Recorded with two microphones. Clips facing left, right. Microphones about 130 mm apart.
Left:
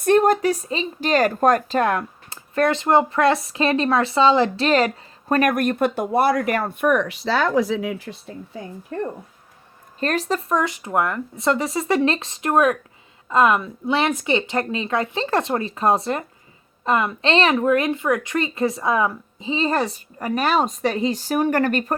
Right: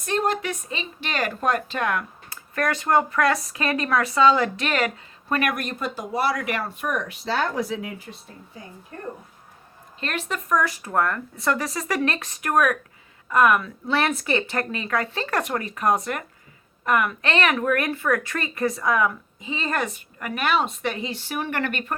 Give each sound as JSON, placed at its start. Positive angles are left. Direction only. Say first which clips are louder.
{"t": 0.0, "sound": "a woman's voice", "louder": "left 8 dB", "side_deg": 50}
{"t": 10.0, "sound": "a woman's voice", "louder": "left 7 dB", "side_deg": 40}